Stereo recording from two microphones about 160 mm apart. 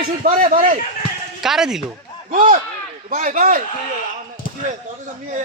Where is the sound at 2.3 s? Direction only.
60° right (ahead or behind).